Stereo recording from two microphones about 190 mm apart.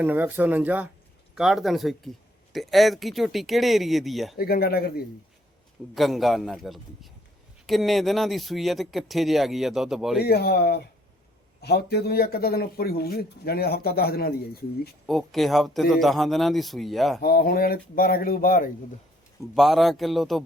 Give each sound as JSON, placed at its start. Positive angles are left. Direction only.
{"t": 0.0, "sound": "speech", "side_deg": -10}
{"t": 4.4, "sound": "speech", "side_deg": 55}
{"t": 5.9, "sound": "speech", "side_deg": 0}
{"t": 10.2, "sound": "a man's voice", "side_deg": 55}
{"t": 15.0, "sound": "speech", "side_deg": 0}
{"t": 17.2, "sound": "speech", "side_deg": 50}
{"t": 19.5, "sound": "speech", "side_deg": 0}